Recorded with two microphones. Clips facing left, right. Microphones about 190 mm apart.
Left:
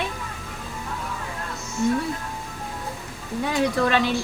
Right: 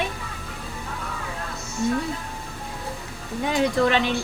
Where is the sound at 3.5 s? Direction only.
20° right (ahead or behind).